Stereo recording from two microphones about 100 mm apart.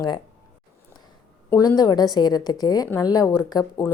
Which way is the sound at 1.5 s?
40° left (ahead or behind).